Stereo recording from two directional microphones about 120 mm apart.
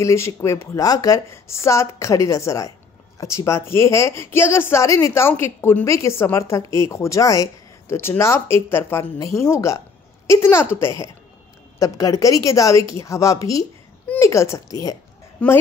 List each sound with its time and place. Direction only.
0.0 s a woman's voice: 25° left (ahead or behind)
15.4 s speech: 10° left (ahead or behind)